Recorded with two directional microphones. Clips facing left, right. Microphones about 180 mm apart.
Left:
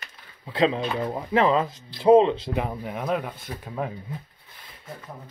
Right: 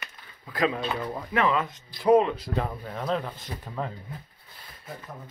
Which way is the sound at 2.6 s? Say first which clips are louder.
Left 2 dB; 15° left (ahead or behind).